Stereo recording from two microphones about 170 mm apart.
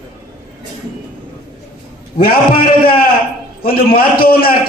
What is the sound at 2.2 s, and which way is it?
A man's voice, 60° left (ahead or behind).